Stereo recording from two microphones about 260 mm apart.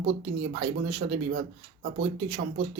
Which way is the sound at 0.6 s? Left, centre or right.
Right.